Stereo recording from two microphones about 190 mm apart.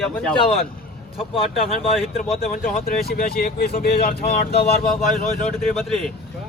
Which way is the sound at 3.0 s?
55° left (ahead or behind).